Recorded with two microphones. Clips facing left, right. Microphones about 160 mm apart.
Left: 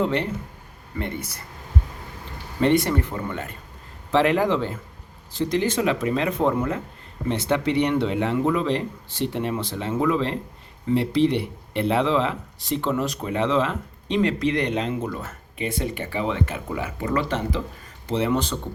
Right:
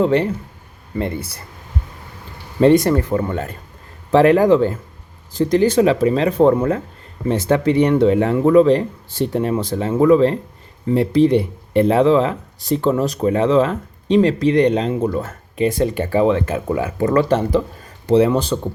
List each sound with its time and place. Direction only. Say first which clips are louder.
0.0 s speech: right 7 dB; 35° right (ahead or behind)
2.6 s speech: right 7 dB; 40° right (ahead or behind)